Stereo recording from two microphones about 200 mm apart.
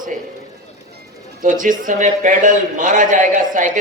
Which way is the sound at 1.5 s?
40° right (ahead or behind).